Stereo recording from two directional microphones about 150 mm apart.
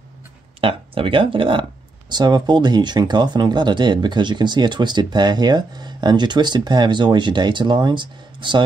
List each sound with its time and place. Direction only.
0.6 s speech: 35° right (ahead or behind)